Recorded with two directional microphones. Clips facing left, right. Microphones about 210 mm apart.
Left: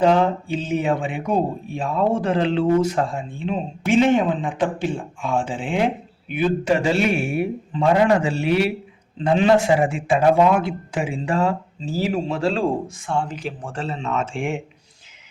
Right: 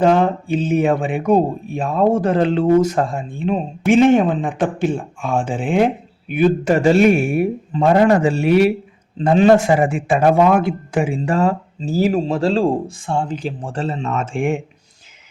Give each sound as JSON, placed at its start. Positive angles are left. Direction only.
{"t": 0.0, "sound": "speech", "side_deg": -50}